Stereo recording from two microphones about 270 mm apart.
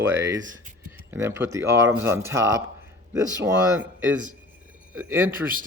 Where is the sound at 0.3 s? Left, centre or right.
Right.